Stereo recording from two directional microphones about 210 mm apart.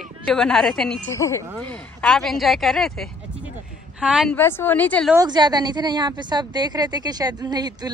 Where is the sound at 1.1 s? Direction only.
15° left (ahead or behind); by 4.4 s centre (ahead or behind).